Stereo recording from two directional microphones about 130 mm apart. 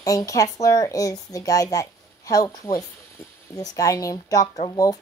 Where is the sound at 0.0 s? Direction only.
25° left (ahead or behind).